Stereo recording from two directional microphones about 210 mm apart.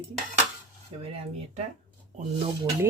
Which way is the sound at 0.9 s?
25° right (ahead or behind).